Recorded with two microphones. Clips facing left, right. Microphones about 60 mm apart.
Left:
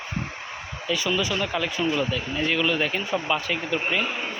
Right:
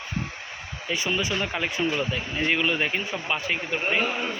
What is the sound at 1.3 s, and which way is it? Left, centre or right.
A man's voice, centre.